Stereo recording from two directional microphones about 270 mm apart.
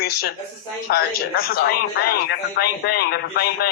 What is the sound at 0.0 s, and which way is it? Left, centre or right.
A man's voice, left.